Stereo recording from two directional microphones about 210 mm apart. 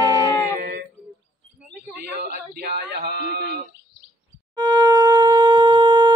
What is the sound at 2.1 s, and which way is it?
Speech, 50° right (ahead or behind).